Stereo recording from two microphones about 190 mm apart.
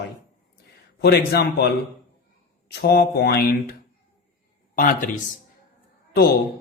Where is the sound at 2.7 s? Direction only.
60° left (ahead or behind).